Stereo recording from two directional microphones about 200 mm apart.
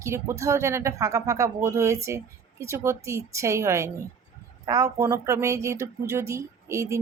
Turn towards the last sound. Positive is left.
turn(degrees=-15)  # may be behind; listen again after turning